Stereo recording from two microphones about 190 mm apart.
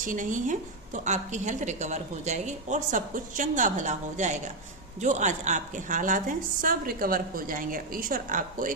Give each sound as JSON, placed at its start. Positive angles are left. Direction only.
{"t": 0.0, "sound": "a woman's voice", "side_deg": -45}